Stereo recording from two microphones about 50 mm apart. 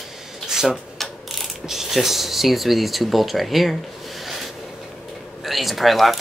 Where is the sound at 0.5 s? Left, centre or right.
Centre.